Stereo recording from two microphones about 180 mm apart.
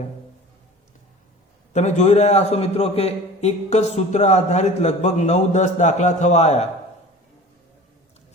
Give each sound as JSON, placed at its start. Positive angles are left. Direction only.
{"t": 1.7, "sound": "a man's voice", "side_deg": 40}